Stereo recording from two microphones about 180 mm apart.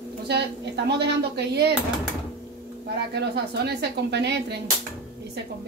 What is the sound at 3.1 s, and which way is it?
Speech, 65° right (ahead or behind).